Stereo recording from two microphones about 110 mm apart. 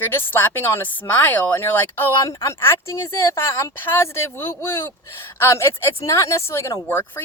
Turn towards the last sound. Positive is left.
turn(degrees=20)  # may be behind; listen again after turning